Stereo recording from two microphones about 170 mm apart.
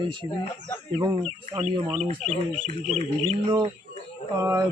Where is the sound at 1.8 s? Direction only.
35° right (ahead or behind).